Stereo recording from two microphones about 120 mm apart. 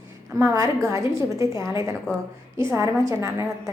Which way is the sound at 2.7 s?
25° right (ahead or behind).